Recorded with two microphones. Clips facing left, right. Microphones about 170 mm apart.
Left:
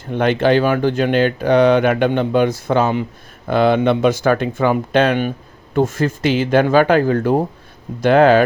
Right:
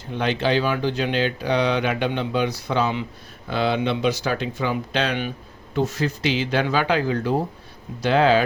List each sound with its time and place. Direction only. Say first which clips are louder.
0.0 s speech: left 7 dB; 55° left (ahead or behind)